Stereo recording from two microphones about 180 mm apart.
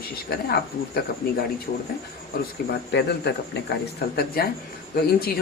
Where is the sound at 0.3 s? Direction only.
60° left (ahead or behind).